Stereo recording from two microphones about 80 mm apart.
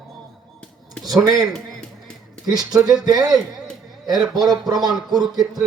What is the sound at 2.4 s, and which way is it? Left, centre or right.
Speech, right.